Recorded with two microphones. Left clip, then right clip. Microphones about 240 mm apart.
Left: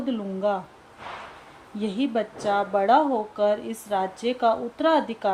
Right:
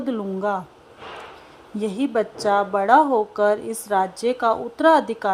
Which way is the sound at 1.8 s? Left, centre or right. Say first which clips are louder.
Right 4 dB; right.